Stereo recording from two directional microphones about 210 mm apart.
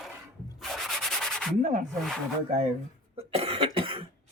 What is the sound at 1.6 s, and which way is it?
Speech, 35° right (ahead or behind).